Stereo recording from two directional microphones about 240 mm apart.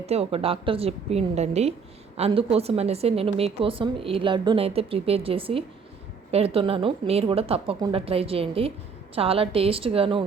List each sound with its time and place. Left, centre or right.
0.0 s a woman's voice: right